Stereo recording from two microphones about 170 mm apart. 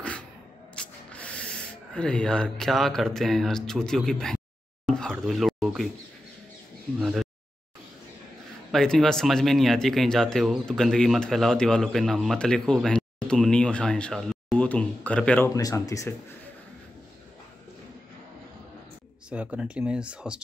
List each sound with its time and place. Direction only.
0.7 s speech: 5° left (ahead or behind)
4.8 s a sound: centre (ahead or behind)
7.0 s speech: centre (ahead or behind)
8.7 s speech: centre (ahead or behind); by 16.2 s 20° left (ahead or behind)
19.2 s speech: 5° right (ahead or behind)